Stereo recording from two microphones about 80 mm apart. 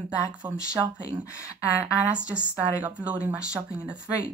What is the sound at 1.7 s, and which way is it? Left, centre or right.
A woman's voice, centre.